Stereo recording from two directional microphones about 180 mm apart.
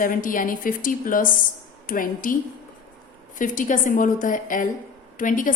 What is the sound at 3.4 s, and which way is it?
A woman's voice, 45° left (ahead or behind).